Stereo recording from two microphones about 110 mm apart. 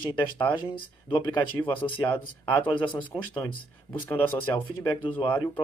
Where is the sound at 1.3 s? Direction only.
15° left (ahead or behind).